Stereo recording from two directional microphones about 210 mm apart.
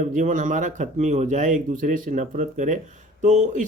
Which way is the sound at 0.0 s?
35° right (ahead or behind).